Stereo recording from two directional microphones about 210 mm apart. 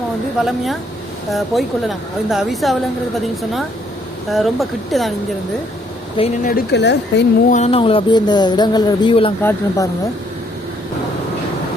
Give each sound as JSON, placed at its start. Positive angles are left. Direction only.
{"t": 0.3, "sound": "speech", "side_deg": 0}
{"t": 4.3, "sound": "speech", "side_deg": 0}
{"t": 6.1, "sound": "speech", "side_deg": 30}
{"t": 6.5, "sound": "a woman's voice", "side_deg": 55}
{"t": 7.5, "sound": "speech", "side_deg": 30}
{"t": 9.4, "sound": "speech", "side_deg": 10}